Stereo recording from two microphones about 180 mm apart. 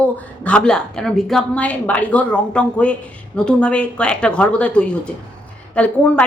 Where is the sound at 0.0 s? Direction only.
5° left (ahead or behind).